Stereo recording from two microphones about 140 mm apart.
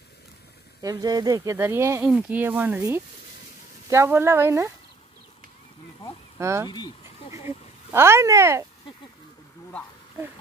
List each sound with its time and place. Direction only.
0.8 s speech: 30° right (ahead or behind)
6.3 s speech: 20° right (ahead or behind)